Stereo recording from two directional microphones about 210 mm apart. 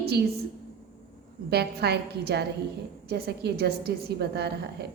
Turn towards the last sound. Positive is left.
turn(degrees=-50)  # may be behind; listen again after turning